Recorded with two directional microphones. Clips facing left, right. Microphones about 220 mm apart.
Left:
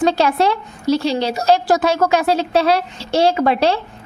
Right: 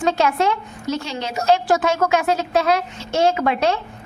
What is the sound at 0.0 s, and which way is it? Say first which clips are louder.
A woman's voice: left 3 dB; 35° left (ahead or behind).